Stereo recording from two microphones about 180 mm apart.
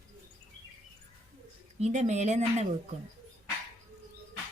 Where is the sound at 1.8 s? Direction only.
40° right (ahead or behind).